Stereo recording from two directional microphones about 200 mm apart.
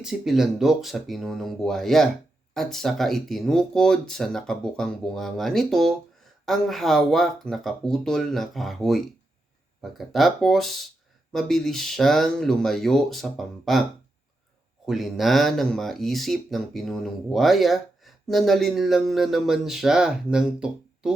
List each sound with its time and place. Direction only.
0.0 s speech: centre (ahead or behind)
14.8 s speech: centre (ahead or behind)